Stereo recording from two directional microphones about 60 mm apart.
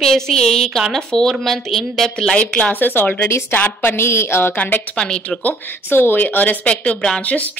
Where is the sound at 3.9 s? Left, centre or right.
Left.